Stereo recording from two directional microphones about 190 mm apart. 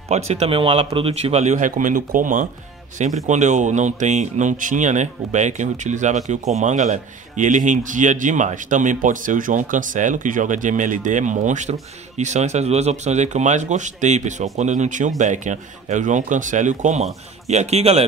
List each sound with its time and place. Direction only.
0.3 s speech: 30° right (ahead or behind)